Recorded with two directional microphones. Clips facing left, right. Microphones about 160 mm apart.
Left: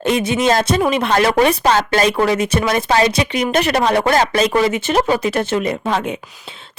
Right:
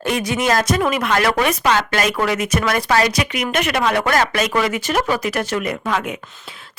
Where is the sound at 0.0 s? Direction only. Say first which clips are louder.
Left 4 dB; 25° left (ahead or behind).